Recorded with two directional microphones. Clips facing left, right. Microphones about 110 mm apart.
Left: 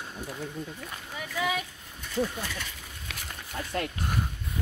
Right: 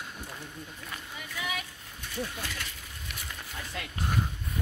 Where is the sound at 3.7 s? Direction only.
50° left (ahead or behind).